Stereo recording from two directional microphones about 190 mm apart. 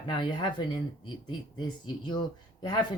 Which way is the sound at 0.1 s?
25° left (ahead or behind).